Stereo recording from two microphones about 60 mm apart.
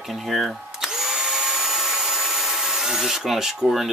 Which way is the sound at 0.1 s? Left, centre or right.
Centre.